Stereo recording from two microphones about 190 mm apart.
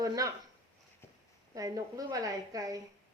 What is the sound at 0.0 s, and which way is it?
Speech, 15° right (ahead or behind).